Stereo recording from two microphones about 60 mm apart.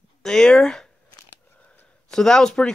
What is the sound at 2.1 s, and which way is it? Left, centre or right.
Speech, centre.